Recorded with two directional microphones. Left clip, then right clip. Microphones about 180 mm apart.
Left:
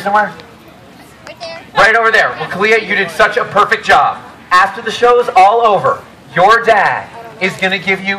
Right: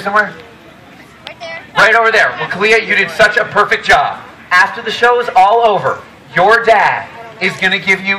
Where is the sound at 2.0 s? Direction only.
30° right (ahead or behind).